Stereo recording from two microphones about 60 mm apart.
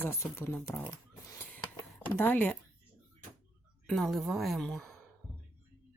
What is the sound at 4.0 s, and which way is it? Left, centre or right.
Speech, centre.